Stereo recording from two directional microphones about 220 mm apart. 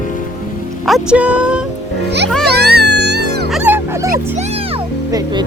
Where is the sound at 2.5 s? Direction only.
45° right (ahead or behind).